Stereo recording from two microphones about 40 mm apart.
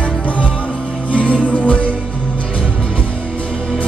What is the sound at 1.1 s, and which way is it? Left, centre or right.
Music, left.